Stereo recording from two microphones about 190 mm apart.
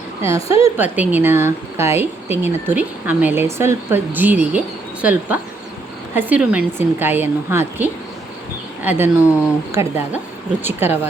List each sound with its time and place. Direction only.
0.2 s a woman's voice: 15° right (ahead or behind)